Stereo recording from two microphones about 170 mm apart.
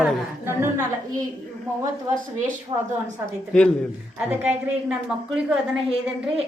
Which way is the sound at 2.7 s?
25° right (ahead or behind).